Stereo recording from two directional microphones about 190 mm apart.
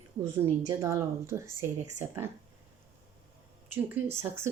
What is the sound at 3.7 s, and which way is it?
Speech, 10° right (ahead or behind).